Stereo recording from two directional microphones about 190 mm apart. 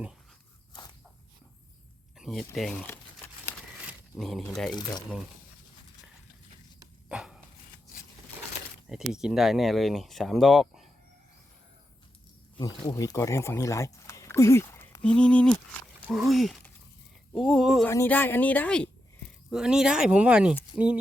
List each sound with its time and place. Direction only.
2.1 s a sound: centre (ahead or behind)
2.6 s speech: centre (ahead or behind)
4.7 s speech: 20° left (ahead or behind)
7.1 s dog: 5° right (ahead or behind)
8.9 s speech: centre (ahead or behind)
12.5 s speech: 20° left (ahead or behind); by 17.8 s centre (ahead or behind)
17.8 s speech: 10° left (ahead or behind); by 21.0 s 5° right (ahead or behind)